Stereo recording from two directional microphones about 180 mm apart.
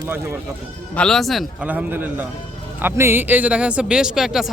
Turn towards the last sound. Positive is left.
turn(degrees=0)  # may be behind; listen again after turning